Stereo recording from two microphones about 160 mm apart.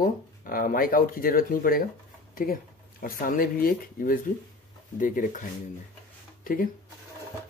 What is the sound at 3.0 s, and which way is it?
Speech, 60° left (ahead or behind).